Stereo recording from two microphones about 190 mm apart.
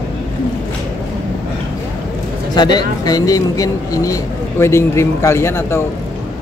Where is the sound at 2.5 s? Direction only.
20° left (ahead or behind).